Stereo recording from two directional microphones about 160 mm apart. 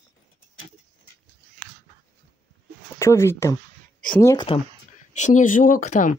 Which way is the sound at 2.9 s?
15° left (ahead or behind).